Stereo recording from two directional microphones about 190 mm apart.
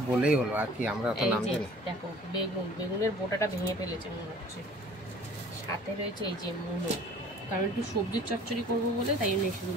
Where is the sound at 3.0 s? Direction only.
15° left (ahead or behind).